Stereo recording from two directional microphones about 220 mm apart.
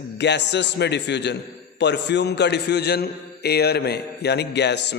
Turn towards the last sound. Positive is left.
turn(degrees=50)  # may be behind; listen again after turning